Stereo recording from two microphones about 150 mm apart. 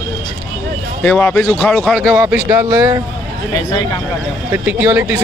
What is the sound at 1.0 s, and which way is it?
Speech, 10° left (ahead or behind).